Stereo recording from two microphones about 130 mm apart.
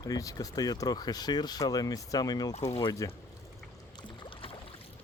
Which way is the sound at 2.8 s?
25° left (ahead or behind).